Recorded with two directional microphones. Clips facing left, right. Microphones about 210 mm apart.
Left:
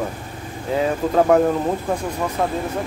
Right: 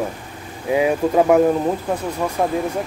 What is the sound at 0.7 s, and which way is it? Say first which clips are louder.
Speech: right 3 dB; 10° right (ahead or behind).